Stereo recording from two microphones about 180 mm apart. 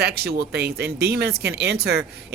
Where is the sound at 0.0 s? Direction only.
60° right (ahead or behind).